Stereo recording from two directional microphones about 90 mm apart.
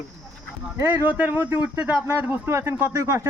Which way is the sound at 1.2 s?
20° right (ahead or behind).